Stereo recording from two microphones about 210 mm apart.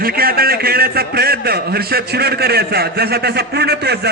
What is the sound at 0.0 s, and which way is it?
A man's voice, 45° right (ahead or behind).